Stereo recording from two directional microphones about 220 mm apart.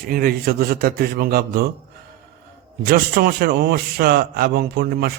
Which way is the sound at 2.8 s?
45° right (ahead or behind).